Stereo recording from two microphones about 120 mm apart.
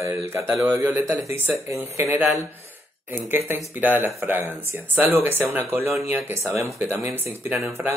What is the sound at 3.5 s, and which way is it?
Speech, 15° right (ahead or behind).